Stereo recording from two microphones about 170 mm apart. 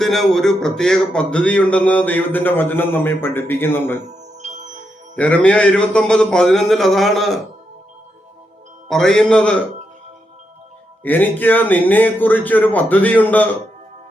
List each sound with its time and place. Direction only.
0.0 s speech: centre (ahead or behind)
4.4 s music: 45° right (ahead or behind)
5.1 s a man's voice: 10° left (ahead or behind)
8.9 s a man's voice: 5° left (ahead or behind)
11.0 s speech: 10° left (ahead or behind)